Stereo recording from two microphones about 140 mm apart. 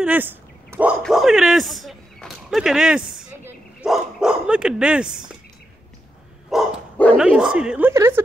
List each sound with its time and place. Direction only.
0.0 s a sound: 10° right (ahead or behind)
1.0 s speech: centre (ahead or behind)
6.5 s bow-wow: 5° right (ahead or behind)
7.2 s speech: 5° right (ahead or behind)
7.9 s a woman's voice: 20° right (ahead or behind)